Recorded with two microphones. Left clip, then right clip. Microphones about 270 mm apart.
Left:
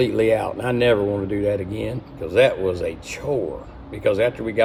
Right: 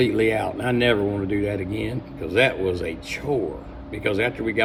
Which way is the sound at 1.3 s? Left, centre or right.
Left.